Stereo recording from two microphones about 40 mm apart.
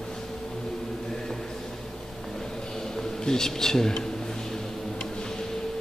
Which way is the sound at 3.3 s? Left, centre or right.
Centre.